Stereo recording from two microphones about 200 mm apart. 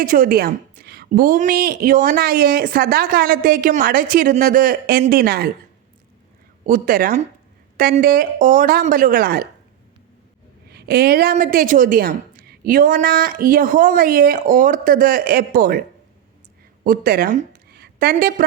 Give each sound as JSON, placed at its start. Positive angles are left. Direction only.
{"t": 0.0, "sound": "a woman's voice", "side_deg": -45}
{"t": 6.7, "sound": "a woman's voice", "side_deg": -45}
{"t": 10.7, "sound": "a woman's voice", "side_deg": -50}
{"t": 16.8, "sound": "a woman's voice", "side_deg": -45}